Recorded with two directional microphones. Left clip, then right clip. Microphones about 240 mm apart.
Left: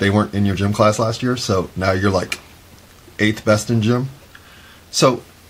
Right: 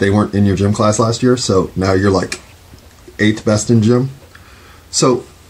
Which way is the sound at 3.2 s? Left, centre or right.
Left.